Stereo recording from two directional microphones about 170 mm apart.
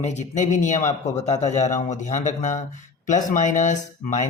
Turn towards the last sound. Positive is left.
turn(degrees=45)  # may be behind; listen again after turning